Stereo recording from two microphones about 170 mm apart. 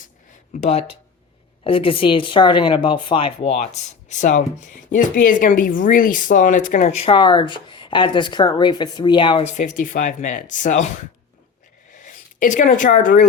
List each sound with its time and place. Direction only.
0.5 s speech: 40° left (ahead or behind)
9.5 s speech: 45° left (ahead or behind)
12.0 s speech: 45° left (ahead or behind)